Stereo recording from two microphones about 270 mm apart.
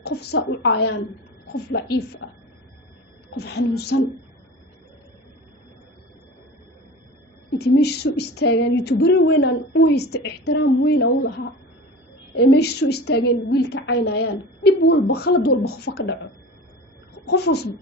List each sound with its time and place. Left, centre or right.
0.0 s a woman's voice: left
7.6 s a woman's voice: left
12.4 s a woman's voice: left
17.2 s a woman's voice: left